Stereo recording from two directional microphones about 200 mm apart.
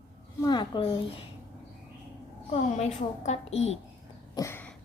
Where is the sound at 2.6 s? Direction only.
35° left (ahead or behind).